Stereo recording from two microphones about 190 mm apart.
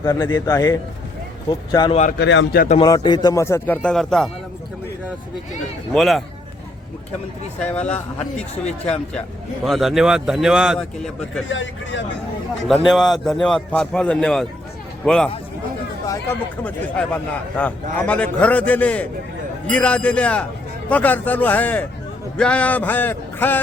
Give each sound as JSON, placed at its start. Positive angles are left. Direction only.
{"t": 0.0, "sound": "a man's voice", "side_deg": 20}
{"t": 2.1, "sound": "a man's voice", "side_deg": 70}
{"t": 2.7, "sound": "speech", "side_deg": 20}
{"t": 5.9, "sound": "a man's voice", "side_deg": 0}
{"t": 7.6, "sound": "a man's voice", "side_deg": 5}
{"t": 11.4, "sound": "speech", "side_deg": 80}
{"t": 12.9, "sound": "a man's voice", "side_deg": 0}